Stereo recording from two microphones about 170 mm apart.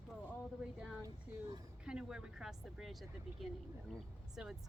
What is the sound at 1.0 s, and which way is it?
Speech, 25° right (ahead or behind).